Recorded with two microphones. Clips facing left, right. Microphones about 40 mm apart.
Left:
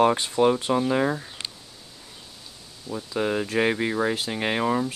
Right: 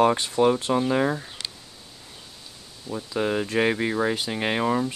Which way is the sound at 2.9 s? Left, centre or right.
Right.